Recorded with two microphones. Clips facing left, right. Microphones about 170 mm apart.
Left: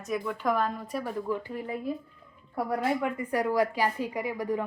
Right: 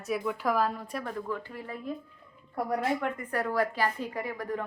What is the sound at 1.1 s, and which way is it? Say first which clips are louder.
Speech: left 4 dB; 15° left (ahead or behind).